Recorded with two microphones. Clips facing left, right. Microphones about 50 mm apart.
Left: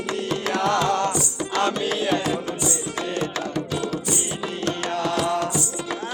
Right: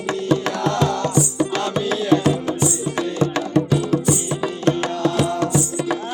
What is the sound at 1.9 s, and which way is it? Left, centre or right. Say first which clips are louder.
Music: right 5 dB; right.